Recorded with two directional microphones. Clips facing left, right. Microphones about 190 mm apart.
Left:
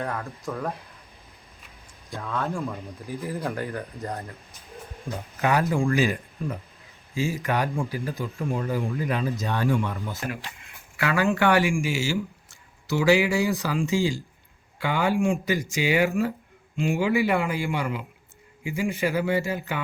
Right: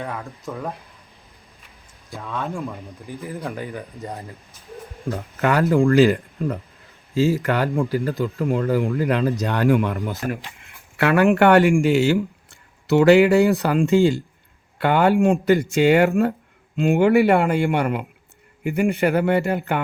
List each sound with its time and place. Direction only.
0.0 s speech: centre (ahead or behind)
2.0 s speech: centre (ahead or behind)
5.4 s speech: 65° right (ahead or behind)